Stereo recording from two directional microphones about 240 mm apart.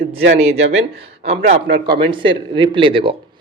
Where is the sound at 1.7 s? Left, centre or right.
Right.